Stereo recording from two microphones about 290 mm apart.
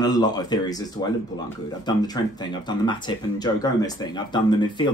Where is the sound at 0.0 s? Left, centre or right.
Centre.